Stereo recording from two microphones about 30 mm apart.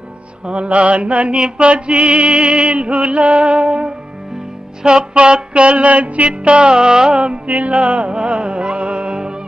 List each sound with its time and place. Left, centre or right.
0.5 s music: right
0.7 s music: right
1.3 s music: right
1.7 s music: right
2.3 s music: right
7.4 s music: right